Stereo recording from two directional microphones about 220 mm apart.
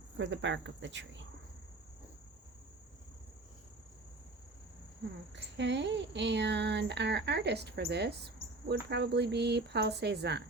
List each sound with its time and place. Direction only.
0.2 s speech: 55° right (ahead or behind)
5.3 s speech: 55° right (ahead or behind)